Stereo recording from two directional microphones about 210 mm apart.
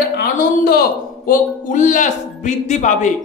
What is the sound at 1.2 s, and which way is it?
Speech, 35° left (ahead or behind).